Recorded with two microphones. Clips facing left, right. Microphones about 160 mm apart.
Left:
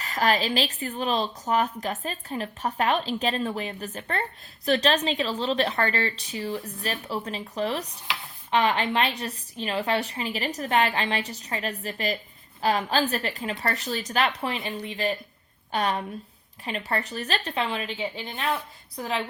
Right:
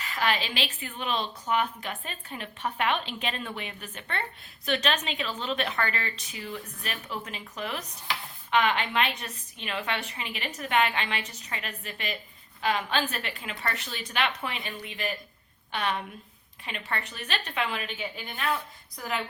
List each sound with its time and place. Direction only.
0.0 s a woman's voice: 40° left (ahead or behind)